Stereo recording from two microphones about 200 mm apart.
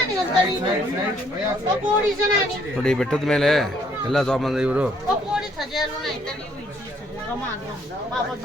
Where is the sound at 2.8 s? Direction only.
5° left (ahead or behind).